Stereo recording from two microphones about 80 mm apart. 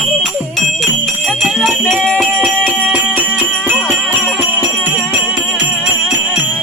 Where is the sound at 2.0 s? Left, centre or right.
Centre.